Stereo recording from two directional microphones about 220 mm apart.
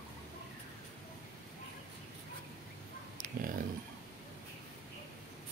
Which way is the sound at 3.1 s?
40° right (ahead or behind).